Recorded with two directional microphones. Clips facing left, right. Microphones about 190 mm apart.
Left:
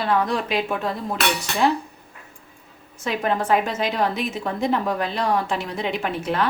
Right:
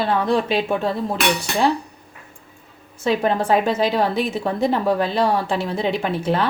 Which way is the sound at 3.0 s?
30° right (ahead or behind).